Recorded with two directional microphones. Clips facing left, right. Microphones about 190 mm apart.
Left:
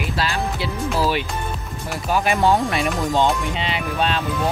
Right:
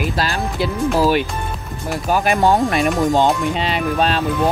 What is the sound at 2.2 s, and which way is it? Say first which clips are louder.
Speech: right 2 dB; 50° right (ahead or behind).